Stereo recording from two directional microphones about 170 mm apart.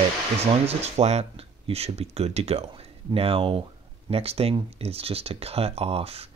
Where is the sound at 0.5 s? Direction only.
40° right (ahead or behind).